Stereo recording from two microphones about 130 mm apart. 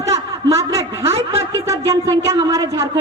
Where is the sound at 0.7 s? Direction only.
25° right (ahead or behind).